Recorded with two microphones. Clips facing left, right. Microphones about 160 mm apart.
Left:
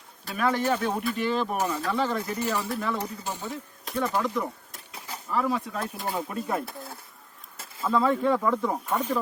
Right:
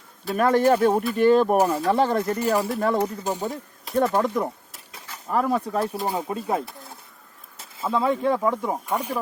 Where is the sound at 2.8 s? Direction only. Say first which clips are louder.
Right 8 dB; 50° right (ahead or behind).